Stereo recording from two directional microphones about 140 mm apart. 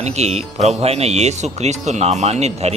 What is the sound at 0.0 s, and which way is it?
Speech, 50° right (ahead or behind).